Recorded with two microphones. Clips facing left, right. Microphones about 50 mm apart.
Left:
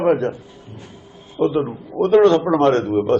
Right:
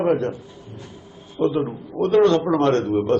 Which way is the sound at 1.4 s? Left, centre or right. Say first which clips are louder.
Left 2 dB; centre.